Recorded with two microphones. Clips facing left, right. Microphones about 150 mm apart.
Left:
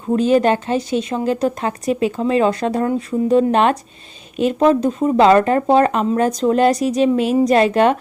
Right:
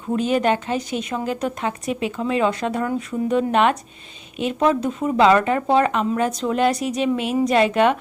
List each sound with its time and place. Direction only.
0.2 s speech: 35° left (ahead or behind)